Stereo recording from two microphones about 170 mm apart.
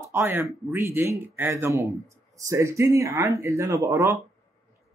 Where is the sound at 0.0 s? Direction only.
15° right (ahead or behind).